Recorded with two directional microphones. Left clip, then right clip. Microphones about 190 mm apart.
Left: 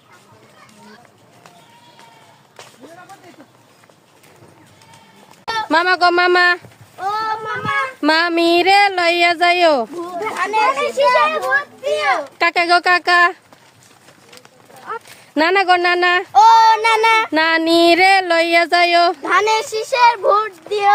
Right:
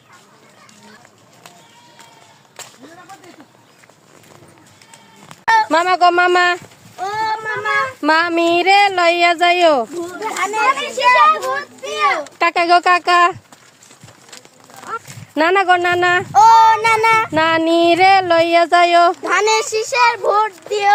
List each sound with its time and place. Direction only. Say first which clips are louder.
2.6 s a sound: right 4 dB; 65° right (ahead or behind)
5.6 s speech: right 1 dB; 10° left (ahead or behind)
7.0 s child singing: right 1 dB; 5° left (ahead or behind)
10.2 s a child's voice: left 2 dB; centre (ahead or behind)
12.4 s speech: right 2 dB; 15° left (ahead or behind)
15.4 s a sound: even; 15° left (ahead or behind)
16.3 s speech: right 1 dB; 5° right (ahead or behind)
17.3 s a sound: even; 20° left (ahead or behind)
19.2 s speech: even; 5° left (ahead or behind)